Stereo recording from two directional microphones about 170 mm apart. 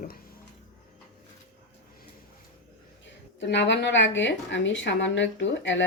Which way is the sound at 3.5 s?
90° left.